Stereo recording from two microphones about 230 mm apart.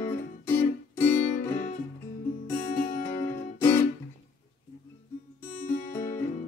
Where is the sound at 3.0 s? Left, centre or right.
Centre.